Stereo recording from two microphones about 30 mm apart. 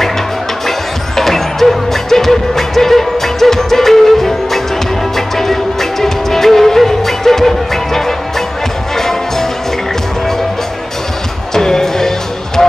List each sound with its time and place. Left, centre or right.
0.7 s music: centre
11.5 s music: centre